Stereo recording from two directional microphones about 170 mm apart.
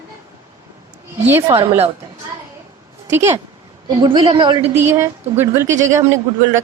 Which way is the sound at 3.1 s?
15° right (ahead or behind).